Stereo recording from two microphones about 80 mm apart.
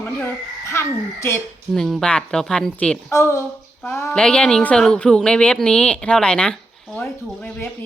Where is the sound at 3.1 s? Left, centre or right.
Left.